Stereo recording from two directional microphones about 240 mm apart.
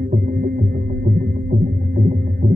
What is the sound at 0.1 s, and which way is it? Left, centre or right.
Music, right.